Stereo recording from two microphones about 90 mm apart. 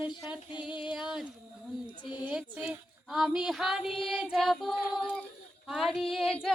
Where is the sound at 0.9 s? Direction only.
5° right (ahead or behind).